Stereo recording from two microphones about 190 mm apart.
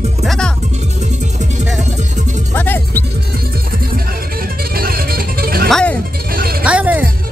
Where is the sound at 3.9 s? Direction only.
50° right (ahead or behind).